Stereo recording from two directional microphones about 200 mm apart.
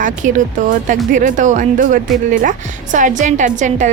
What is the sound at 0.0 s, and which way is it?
Speech, 40° right (ahead or behind).